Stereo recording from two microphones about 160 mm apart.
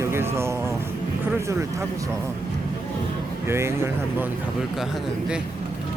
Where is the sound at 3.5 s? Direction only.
15° right (ahead or behind).